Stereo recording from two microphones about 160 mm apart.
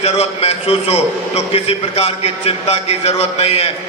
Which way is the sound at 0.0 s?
40° left (ahead or behind).